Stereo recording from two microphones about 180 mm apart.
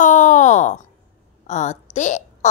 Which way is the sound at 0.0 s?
45° left (ahead or behind).